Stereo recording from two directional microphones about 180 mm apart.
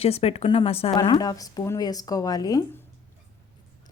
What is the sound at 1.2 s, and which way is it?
Speech, 20° left (ahead or behind).